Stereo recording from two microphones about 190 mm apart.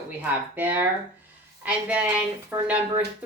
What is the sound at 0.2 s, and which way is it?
A woman's voice, 10° right (ahead or behind).